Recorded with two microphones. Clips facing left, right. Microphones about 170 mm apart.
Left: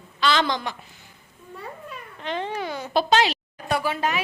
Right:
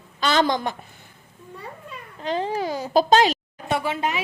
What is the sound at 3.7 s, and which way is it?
Speech, 25° right (ahead or behind).